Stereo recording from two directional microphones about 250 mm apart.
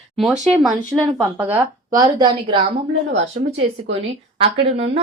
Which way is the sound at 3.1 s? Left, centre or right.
Right.